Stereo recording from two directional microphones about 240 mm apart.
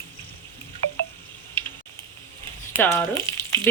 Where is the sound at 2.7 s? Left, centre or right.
Centre.